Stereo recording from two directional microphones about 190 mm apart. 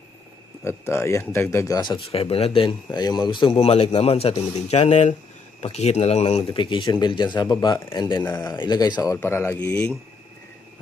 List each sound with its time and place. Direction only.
0.7 s a man's voice: 15° left (ahead or behind)